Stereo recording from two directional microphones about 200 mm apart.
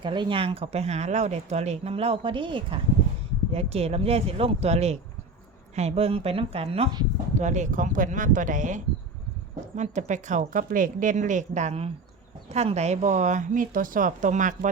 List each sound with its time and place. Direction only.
0.0 s speech: 25° right (ahead or behind); by 14.7 s 40° right (ahead or behind)